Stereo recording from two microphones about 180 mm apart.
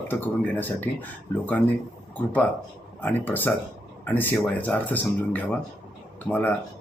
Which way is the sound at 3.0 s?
10° left (ahead or behind).